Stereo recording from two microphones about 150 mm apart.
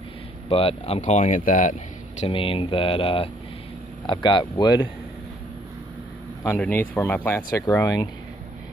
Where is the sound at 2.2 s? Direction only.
35° left (ahead or behind).